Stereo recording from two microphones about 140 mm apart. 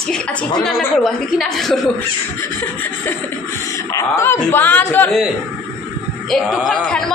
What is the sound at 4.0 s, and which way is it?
A woman's voice, 20° left (ahead or behind).